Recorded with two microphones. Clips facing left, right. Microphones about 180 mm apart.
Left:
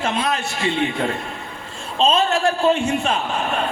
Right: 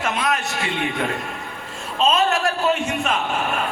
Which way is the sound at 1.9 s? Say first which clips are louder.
Left 1 dB; 30° left (ahead or behind).